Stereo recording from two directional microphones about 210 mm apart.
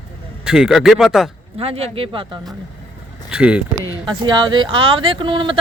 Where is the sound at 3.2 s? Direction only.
5° right (ahead or behind).